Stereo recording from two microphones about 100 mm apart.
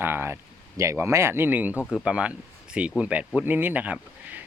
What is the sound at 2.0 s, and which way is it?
Speech, 10° right (ahead or behind).